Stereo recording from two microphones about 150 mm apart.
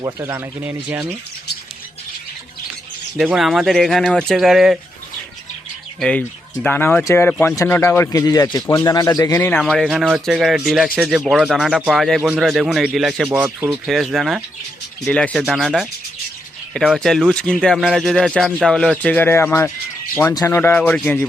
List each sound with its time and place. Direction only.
0.0 s speech: 20° right (ahead or behind)
3.2 s speech: 5° right (ahead or behind)
6.0 s speech: 5° left (ahead or behind)
9.6 s speech: 5° left (ahead or behind)
13.2 s speech: 15° right (ahead or behind)
13.7 s speech: centre (ahead or behind)